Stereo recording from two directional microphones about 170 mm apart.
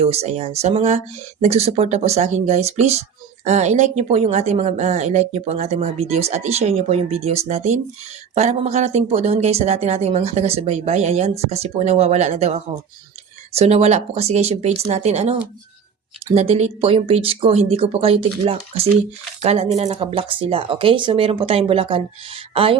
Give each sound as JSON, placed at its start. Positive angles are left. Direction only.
{"t": 0.0, "sound": "speech", "side_deg": -40}